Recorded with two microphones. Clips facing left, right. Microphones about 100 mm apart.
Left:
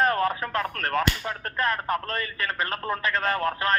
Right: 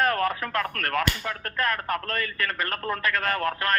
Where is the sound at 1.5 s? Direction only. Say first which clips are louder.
Left 1 dB; 30° left (ahead or behind).